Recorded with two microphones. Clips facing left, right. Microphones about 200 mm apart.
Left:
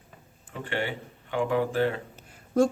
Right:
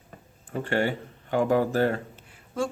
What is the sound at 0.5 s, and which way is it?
Speech, 45° right (ahead or behind).